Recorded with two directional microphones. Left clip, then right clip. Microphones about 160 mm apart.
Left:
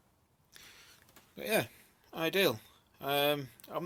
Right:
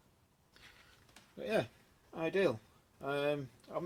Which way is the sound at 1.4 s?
15° left (ahead or behind).